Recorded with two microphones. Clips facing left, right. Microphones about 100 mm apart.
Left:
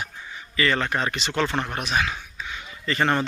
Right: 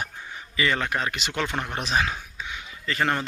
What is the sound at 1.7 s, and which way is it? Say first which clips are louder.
Speech: even; 30° right (ahead or behind).